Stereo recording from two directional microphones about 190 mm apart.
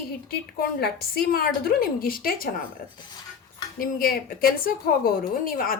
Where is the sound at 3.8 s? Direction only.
50° left (ahead or behind).